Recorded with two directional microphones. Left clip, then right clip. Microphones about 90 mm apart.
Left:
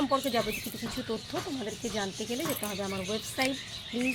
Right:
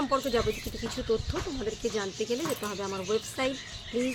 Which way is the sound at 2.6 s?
30° right (ahead or behind).